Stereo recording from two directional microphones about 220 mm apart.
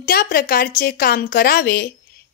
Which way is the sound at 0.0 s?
45° left (ahead or behind).